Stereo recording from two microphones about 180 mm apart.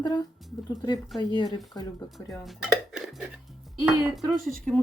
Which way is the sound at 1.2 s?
25° left (ahead or behind).